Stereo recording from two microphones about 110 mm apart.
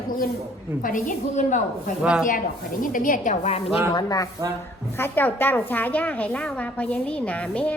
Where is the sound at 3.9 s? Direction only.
35° left (ahead or behind).